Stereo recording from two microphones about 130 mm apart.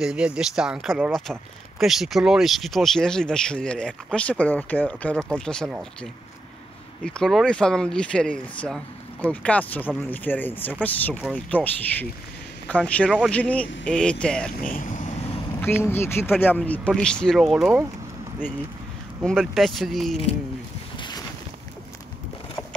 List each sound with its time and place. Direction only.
0.0 s speech: 10° right (ahead or behind)
7.1 s speech: 5° left (ahead or behind)
14.7 s speech: 80° left
15.6 s speech: 15° left (ahead or behind); by 17.7 s 5° right (ahead or behind)
19.2 s speech: centre (ahead or behind)